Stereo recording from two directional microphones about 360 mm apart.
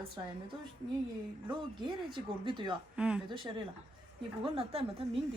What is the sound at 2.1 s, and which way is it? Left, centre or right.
Speech, centre.